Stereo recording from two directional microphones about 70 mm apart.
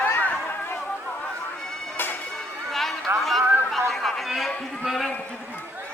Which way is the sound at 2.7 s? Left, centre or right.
Centre.